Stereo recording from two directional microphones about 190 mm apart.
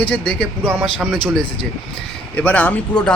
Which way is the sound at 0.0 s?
5° left (ahead or behind).